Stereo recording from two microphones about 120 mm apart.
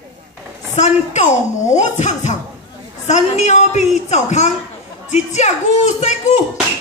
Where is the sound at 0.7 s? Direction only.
80° left.